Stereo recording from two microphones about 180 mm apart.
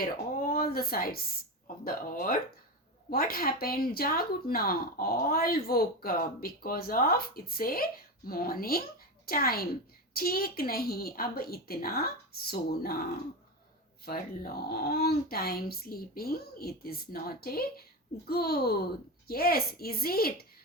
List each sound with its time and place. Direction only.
0.0 s speech: 55° left (ahead or behind)
14.0 s speech: 55° left (ahead or behind)